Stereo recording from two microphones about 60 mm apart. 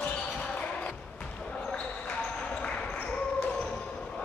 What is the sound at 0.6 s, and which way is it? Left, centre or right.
Basketball bounce, centre.